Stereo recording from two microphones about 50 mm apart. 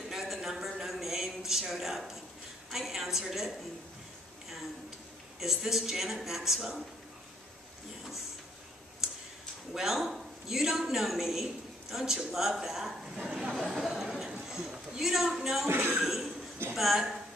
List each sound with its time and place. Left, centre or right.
0.1 s a sound: centre
2.7 s a woman's voice: centre
5.4 s speech: centre
9.8 s a woman's voice: centre
13.6 s a sound: centre
15.0 s speech: centre
15.7 s speech: right
16.0 s a sound: centre
16.7 s a woman's voice: centre